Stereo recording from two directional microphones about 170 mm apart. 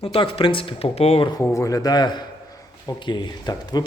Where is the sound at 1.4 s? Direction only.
15° left (ahead or behind).